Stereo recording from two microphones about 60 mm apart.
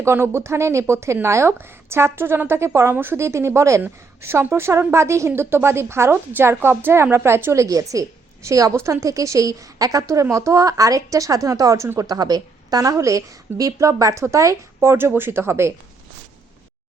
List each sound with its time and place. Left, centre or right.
0.0 s a woman's voice: right
8.7 s a woman's voice: right
11.9 s a woman's voice: right